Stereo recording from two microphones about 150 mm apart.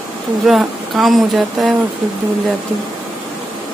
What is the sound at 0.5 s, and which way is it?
Speech, centre (ahead or behind).